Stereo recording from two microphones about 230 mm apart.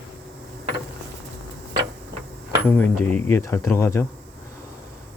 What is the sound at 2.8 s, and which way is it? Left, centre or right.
Speech, centre.